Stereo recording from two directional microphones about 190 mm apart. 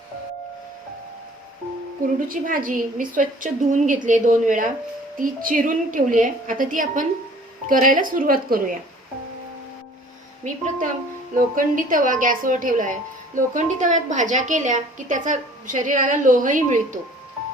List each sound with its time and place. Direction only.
2.1 s a woman's voice: 45° right (ahead or behind)
10.4 s a woman's voice: 40° right (ahead or behind)